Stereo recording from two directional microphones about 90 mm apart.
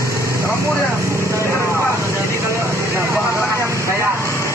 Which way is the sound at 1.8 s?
30° left (ahead or behind).